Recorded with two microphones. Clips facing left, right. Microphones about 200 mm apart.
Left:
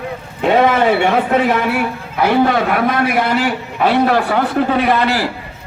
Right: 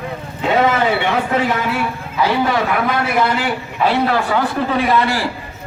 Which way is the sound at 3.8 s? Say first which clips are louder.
Left 3 dB; 55° left (ahead or behind).